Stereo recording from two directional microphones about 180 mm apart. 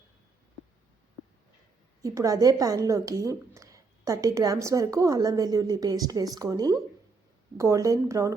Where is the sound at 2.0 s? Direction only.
20° right (ahead or behind).